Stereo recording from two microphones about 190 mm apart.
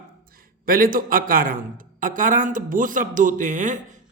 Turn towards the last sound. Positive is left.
turn(degrees=-40)  # may be behind; listen again after turning